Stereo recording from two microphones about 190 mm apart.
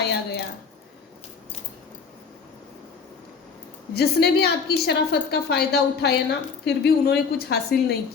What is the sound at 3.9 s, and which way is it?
A woman's voice, 60° left (ahead or behind).